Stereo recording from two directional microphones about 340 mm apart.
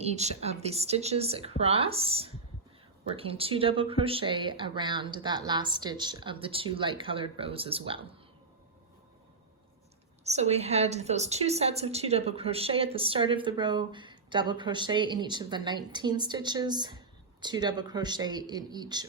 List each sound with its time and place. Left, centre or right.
0.0 s a woman's voice: centre
10.2 s a woman's voice: centre